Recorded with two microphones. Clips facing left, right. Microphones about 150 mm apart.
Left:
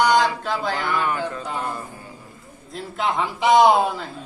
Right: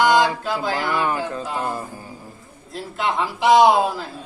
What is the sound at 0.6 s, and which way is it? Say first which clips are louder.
Speech: right 2 dB; centre (ahead or behind).